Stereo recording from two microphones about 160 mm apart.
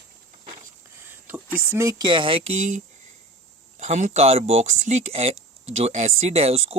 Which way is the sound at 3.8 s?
45° right (ahead or behind).